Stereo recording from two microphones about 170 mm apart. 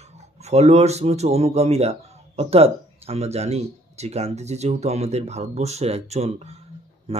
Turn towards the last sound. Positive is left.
turn(degrees=-40)  # may be behind; listen again after turning